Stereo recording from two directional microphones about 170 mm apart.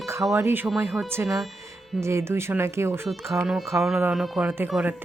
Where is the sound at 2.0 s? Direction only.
15° right (ahead or behind).